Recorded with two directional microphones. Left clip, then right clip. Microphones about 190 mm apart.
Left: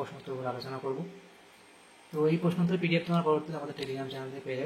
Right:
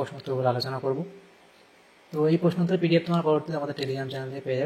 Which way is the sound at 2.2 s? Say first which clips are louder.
Right 6 dB; 20° right (ahead or behind).